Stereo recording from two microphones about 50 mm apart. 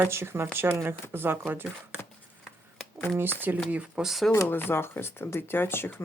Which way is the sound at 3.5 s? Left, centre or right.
Right.